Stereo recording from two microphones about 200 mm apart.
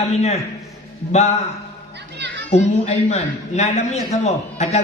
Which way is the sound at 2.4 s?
35° left (ahead or behind).